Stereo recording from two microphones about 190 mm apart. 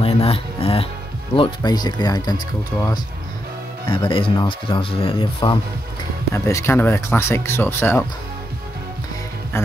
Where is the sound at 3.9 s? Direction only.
25° left (ahead or behind).